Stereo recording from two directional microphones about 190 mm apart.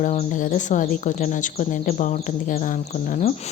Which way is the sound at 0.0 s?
40° left (ahead or behind).